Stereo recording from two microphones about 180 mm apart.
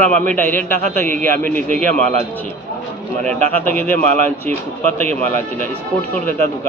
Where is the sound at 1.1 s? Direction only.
45° right (ahead or behind).